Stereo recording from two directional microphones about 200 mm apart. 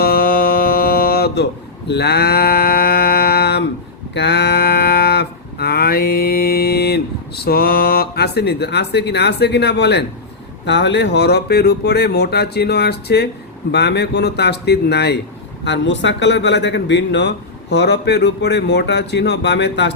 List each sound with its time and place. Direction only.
0.0 s music: 45° left (ahead or behind)
1.9 s a sound: 55° left (ahead or behind)
10.7 s speech: 60° left (ahead or behind)